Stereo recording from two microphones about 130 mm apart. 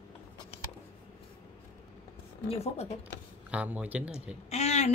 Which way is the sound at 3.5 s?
10° right (ahead or behind).